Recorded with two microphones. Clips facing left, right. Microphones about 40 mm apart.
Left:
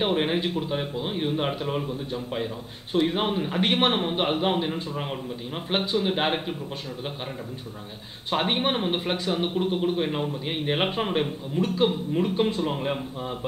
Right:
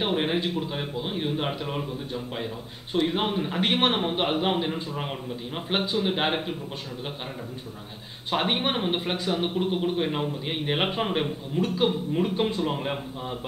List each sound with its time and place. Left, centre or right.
0.0 s a man's voice: centre
8.3 s a man's voice: centre